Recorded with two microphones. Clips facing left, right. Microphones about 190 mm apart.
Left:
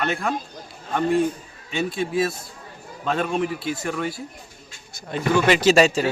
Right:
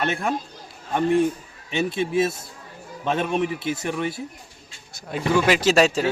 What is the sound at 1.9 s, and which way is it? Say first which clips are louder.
Speech: right 1 dB; 25° right (ahead or behind).